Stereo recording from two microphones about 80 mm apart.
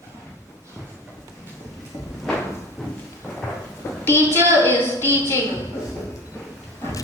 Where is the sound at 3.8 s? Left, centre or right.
Left.